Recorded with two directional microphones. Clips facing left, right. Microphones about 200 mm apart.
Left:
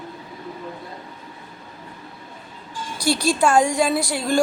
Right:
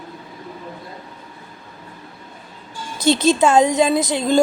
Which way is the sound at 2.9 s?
20° right (ahead or behind).